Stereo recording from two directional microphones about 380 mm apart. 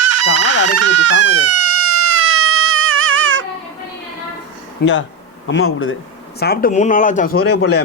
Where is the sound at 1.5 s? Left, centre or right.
Right.